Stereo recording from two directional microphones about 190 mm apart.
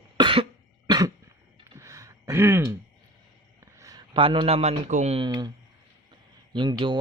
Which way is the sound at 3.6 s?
15° right (ahead or behind).